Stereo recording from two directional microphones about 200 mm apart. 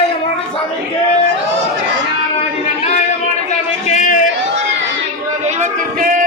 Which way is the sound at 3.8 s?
40° left (ahead or behind).